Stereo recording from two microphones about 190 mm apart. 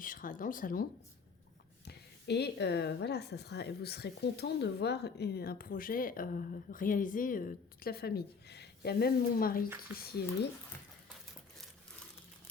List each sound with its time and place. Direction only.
0.0 s speech: 45° left (ahead or behind)
1.8 s a woman's voice: 60° left (ahead or behind)